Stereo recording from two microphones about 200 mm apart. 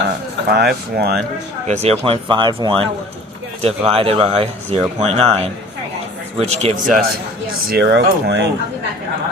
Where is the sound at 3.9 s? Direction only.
30° right (ahead or behind).